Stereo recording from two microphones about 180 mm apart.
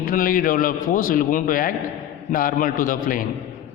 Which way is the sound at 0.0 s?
50° left (ahead or behind).